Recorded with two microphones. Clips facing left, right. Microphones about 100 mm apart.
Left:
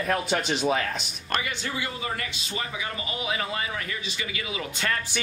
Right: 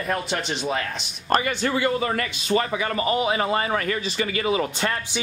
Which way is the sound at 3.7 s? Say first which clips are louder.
Right 9 dB; 50° right (ahead or behind).